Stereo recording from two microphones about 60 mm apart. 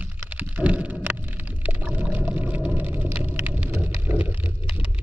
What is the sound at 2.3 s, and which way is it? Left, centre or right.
Vehicle, right.